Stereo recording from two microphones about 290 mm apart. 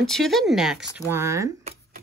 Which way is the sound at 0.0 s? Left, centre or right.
Centre.